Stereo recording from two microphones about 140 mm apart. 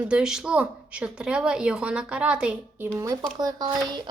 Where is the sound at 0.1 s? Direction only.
5° right (ahead or behind).